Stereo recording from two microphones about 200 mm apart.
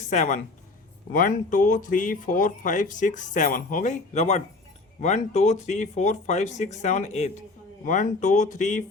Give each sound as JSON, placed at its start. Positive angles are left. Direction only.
{"t": 0.1, "sound": "speech", "side_deg": 40}